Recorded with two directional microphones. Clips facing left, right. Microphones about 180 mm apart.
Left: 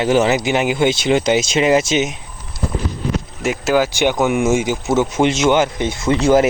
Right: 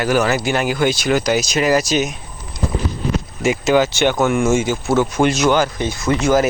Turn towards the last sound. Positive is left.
turn(degrees=30)  # may be behind; listen again after turning